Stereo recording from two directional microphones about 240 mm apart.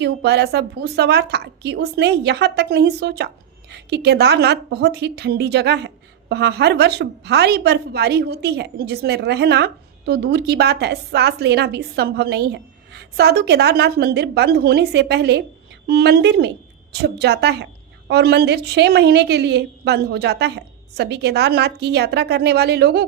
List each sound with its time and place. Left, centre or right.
0.0 s a woman's voice: right